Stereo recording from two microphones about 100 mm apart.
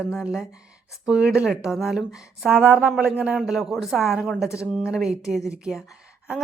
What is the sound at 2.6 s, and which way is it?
Speech, 20° right (ahead or behind).